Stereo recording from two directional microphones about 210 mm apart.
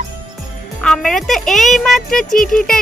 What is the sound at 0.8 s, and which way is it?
Speech, centre (ahead or behind).